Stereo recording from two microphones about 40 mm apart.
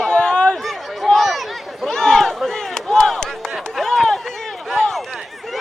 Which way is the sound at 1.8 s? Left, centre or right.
Centre.